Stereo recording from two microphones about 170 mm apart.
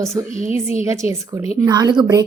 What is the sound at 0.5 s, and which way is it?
Speech, 40° left (ahead or behind).